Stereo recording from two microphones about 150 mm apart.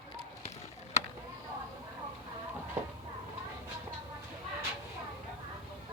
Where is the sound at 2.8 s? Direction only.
15° right (ahead or behind).